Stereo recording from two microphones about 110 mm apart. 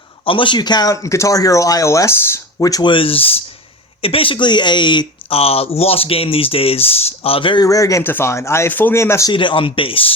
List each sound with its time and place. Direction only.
0.3 s speech: 50° left (ahead or behind)
1.0 s speech: 30° left (ahead or behind)
2.8 s speech: 50° left (ahead or behind)
5.3 s speech: 65° left (ahead or behind)
7.6 s speech: 30° left (ahead or behind)
9.3 s speech: 50° left (ahead or behind)